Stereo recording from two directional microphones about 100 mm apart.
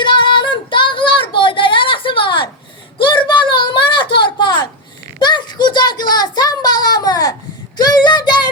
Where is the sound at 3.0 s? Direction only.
55° left (ahead or behind).